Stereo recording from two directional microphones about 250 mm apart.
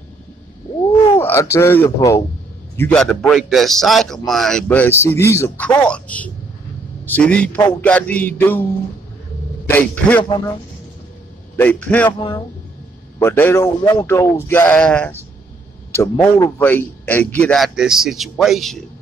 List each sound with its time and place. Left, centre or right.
1.2 s a man's voice: centre
9.7 s speech: centre
11.5 s speech: centre
12.1 s a man's voice: centre